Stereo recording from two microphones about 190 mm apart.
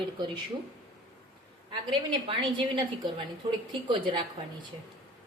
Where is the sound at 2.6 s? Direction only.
25° right (ahead or behind).